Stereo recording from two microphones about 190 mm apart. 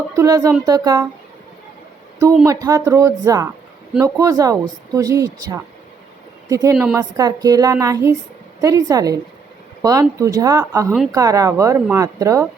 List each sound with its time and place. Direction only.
0.2 s speech: 20° right (ahead or behind)
2.5 s speech: 20° right (ahead or behind)